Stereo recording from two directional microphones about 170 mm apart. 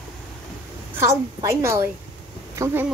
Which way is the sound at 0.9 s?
15° right (ahead or behind).